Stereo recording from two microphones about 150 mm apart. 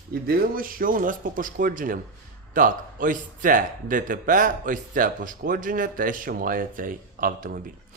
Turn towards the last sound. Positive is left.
turn(degrees=-70)  # may be behind; listen again after turning